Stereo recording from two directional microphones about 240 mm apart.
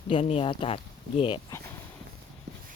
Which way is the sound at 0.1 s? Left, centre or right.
Left.